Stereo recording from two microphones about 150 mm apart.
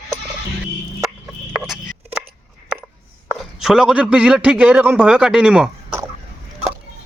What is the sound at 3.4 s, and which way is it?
A man's voice, centre (ahead or behind).